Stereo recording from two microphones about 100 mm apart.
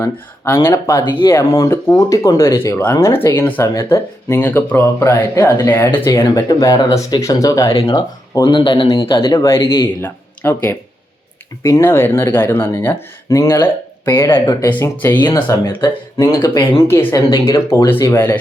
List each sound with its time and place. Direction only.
0.6 s speech: 30° left (ahead or behind)
2.6 s speech: 25° left (ahead or behind)
6.1 s speech: 35° left (ahead or behind)
8.4 s speech: 55° left (ahead or behind)
9.3 s speech: 35° left (ahead or behind)
10.0 s speech: 20° left (ahead or behind)
14.4 s speech: 40° left (ahead or behind)
14.7 s speech: 15° left (ahead or behind)
15.3 s speech: 30° left (ahead or behind)
16.9 s speech: 25° left (ahead or behind)